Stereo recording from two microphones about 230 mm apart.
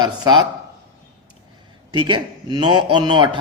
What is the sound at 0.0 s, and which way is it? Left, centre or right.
Speech, centre.